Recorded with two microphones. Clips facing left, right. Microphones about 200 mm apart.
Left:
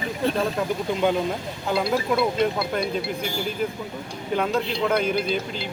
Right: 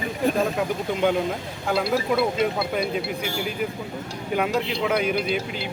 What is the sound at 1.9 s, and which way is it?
Speech, 5° right (ahead or behind).